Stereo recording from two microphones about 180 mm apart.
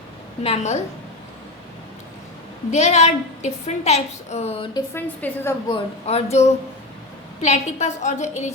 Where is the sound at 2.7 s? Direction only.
40° left (ahead or behind).